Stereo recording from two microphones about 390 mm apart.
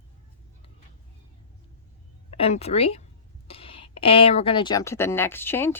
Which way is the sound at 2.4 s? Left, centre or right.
Centre.